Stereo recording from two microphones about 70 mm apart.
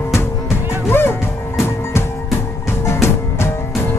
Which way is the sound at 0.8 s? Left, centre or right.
Left.